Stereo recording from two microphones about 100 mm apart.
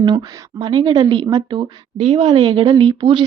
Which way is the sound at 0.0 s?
55° right (ahead or behind).